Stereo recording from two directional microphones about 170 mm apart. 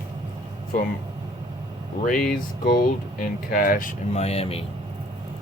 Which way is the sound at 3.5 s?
55° left (ahead or behind).